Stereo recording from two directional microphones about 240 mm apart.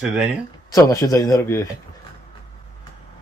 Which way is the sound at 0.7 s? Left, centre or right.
Centre.